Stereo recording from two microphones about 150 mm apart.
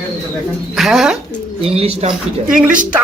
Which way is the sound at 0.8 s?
Centre (ahead or behind).